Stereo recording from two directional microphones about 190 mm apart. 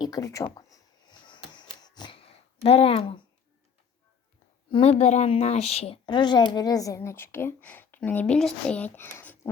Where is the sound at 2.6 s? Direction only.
30° left (ahead or behind).